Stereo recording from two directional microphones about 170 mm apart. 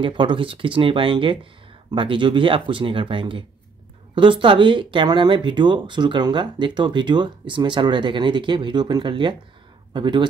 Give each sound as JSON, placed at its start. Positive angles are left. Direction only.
{"t": 0.0, "sound": "speech", "side_deg": -30}